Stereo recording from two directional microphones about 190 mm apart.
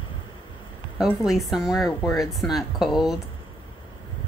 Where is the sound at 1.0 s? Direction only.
Centre (ahead or behind).